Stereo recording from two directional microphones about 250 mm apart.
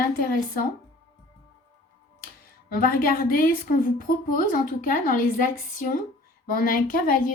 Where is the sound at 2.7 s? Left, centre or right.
Left.